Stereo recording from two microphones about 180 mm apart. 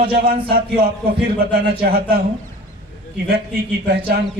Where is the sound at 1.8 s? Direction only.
60° right (ahead or behind).